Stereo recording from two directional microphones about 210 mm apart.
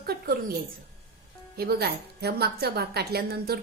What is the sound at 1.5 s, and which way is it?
A woman's voice, 50° right (ahead or behind).